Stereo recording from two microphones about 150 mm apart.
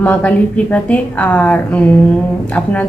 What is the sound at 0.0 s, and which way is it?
A woman's voice, 10° left (ahead or behind).